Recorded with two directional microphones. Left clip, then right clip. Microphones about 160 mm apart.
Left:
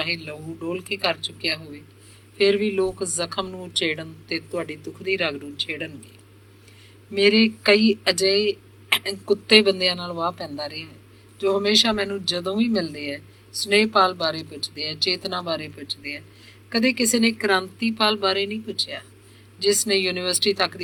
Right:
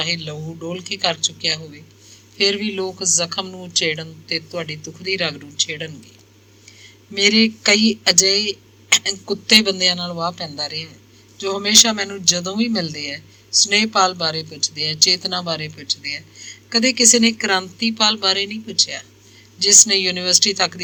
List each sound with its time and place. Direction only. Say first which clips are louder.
0.0 s speech: right 4 dB; 20° right (ahead or behind)
7.1 s speech: right 2 dB; 15° right (ahead or behind)